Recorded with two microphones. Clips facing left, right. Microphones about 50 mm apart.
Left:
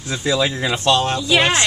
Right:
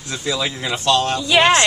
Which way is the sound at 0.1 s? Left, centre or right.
Left.